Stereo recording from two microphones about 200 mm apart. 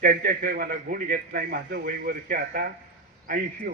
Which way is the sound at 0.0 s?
45° right (ahead or behind).